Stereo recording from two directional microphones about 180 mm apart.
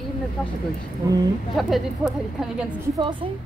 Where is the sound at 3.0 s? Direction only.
25° right (ahead or behind).